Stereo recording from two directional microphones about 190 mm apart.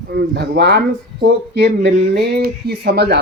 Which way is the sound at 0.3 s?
60° right (ahead or behind).